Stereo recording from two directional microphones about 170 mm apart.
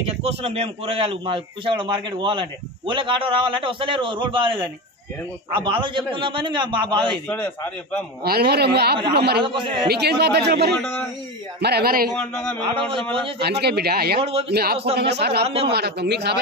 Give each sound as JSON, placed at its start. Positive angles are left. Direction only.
{"t": 0.0, "sound": "a man's voice", "side_deg": -35}
{"t": 5.5, "sound": "a man's voice", "side_deg": -30}
{"t": 7.2, "sound": "a man's voice", "side_deg": 10}
{"t": 8.2, "sound": "speech", "side_deg": -65}
{"t": 9.5, "sound": "a man's voice", "side_deg": -30}
{"t": 9.8, "sound": "a man's voice", "side_deg": -75}
{"t": 12.5, "sound": "a man's voice", "side_deg": -30}
{"t": 13.4, "sound": "a man's voice", "side_deg": -75}
{"t": 15.0, "sound": "speech", "side_deg": -75}
{"t": 15.4, "sound": "a man's voice", "side_deg": -35}
{"t": 15.7, "sound": "speech", "side_deg": -75}